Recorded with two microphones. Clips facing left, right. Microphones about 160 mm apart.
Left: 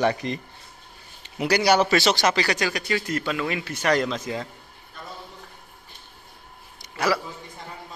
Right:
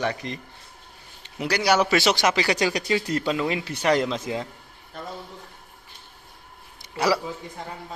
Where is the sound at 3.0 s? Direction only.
35° right (ahead or behind); by 4.5 s 20° right (ahead or behind).